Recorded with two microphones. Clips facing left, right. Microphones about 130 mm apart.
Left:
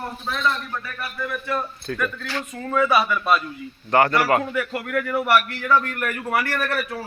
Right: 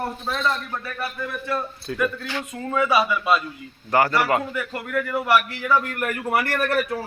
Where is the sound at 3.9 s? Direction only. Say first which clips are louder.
Left 2 dB; 5° right (ahead or behind).